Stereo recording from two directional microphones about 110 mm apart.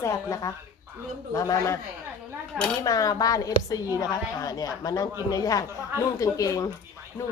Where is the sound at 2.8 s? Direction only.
35° left (ahead or behind).